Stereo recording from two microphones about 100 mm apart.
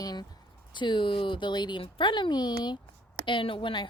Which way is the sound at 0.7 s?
50° left (ahead or behind).